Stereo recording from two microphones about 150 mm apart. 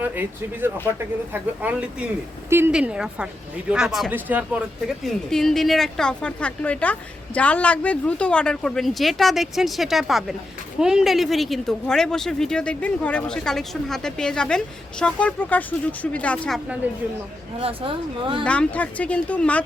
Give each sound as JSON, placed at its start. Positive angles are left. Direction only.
{"t": 0.0, "sound": "speech", "side_deg": -15}
{"t": 5.0, "sound": "speech", "side_deg": 5}
{"t": 17.6, "sound": "speech", "side_deg": -35}
{"t": 18.4, "sound": "speech", "side_deg": 10}